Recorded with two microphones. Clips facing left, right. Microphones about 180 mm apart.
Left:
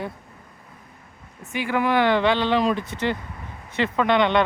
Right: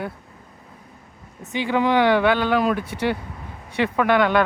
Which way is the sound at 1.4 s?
20° right (ahead or behind).